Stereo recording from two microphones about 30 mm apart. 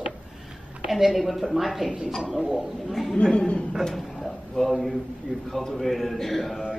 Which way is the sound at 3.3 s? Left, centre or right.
Left.